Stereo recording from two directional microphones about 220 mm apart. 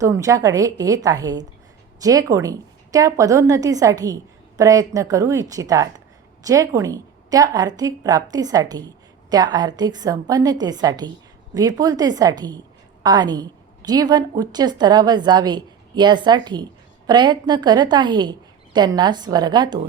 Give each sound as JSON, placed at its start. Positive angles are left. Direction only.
{"t": 0.0, "sound": "a woman's voice", "side_deg": -15}